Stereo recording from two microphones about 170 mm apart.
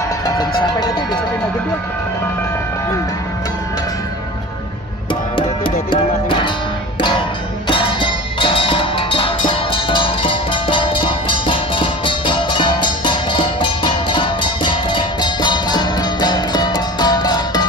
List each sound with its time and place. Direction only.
5.9 s music: 30° left (ahead or behind)
7.6 s music: 30° left (ahead or behind)